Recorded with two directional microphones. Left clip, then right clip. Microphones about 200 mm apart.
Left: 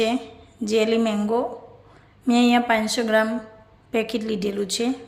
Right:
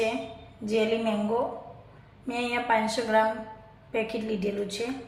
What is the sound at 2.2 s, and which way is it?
A woman's voice, 50° left (ahead or behind).